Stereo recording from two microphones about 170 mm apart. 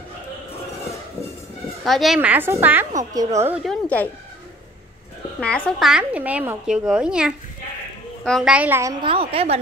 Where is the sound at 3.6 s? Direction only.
10° left (ahead or behind).